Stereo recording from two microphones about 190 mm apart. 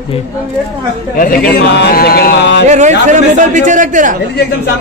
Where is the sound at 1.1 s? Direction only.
50° left (ahead or behind); by 2.6 s 65° left (ahead or behind).